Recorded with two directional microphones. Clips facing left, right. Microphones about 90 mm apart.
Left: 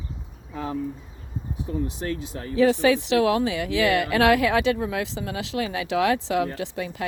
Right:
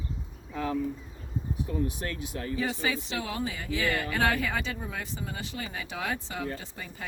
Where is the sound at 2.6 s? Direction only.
85° left.